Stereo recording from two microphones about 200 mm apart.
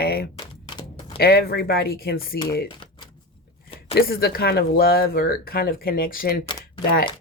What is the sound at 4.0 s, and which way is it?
Speech, 50° left (ahead or behind).